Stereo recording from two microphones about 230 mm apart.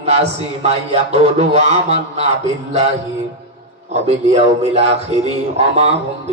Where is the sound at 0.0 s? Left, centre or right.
Right.